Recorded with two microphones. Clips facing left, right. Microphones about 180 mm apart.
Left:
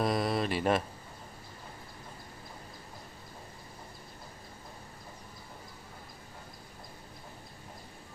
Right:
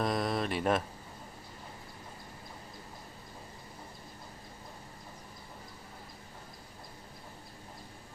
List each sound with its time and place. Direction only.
0.0 s speech: 5° left (ahead or behind)